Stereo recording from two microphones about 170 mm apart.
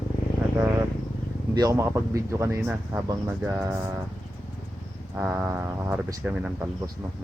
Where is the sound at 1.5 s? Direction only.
20° right (ahead or behind).